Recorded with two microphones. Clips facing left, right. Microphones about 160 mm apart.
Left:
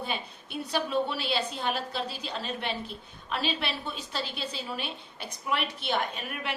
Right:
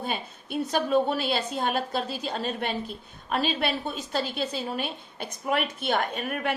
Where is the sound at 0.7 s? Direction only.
45° right (ahead or behind).